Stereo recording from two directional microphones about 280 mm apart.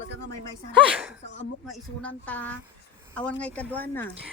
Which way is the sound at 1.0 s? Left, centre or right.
Centre.